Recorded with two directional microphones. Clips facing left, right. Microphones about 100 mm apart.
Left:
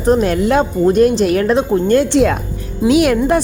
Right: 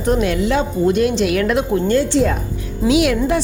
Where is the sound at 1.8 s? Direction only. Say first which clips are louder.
Left 4 dB; 60° left (ahead or behind).